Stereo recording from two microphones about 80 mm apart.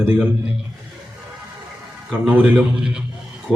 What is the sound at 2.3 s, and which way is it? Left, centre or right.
Speech, right.